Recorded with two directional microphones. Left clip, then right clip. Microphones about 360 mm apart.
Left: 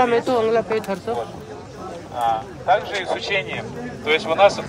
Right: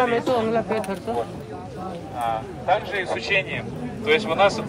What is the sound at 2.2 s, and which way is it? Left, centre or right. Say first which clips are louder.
Speech: left 5 dB; centre.